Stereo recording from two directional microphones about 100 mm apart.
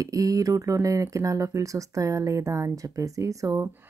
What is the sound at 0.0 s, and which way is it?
Speech, 35° right (ahead or behind).